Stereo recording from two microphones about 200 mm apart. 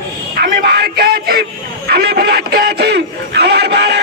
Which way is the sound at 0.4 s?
50° right (ahead or behind).